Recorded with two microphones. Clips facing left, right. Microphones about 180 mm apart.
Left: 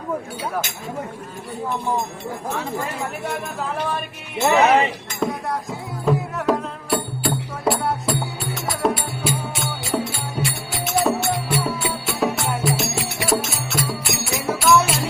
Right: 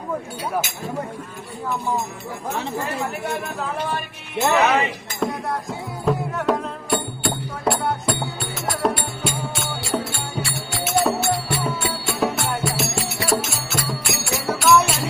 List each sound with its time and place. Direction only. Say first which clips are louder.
4.5 s speech: left 3 dB; 30° left (ahead or behind)
5.2 s music: even; centre (ahead or behind)